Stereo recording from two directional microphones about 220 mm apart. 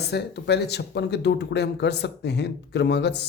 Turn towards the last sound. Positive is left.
turn(degrees=50)  # may be behind; listen again after turning